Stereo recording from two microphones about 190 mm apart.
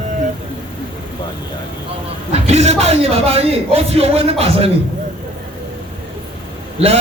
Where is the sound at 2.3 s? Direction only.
35° right (ahead or behind).